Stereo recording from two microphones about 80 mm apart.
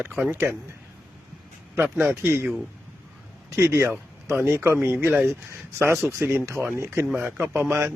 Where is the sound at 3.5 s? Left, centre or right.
Right.